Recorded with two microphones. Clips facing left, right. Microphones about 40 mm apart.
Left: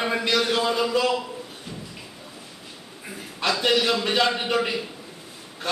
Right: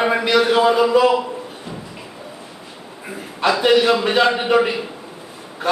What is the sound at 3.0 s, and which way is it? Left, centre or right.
Speech, centre.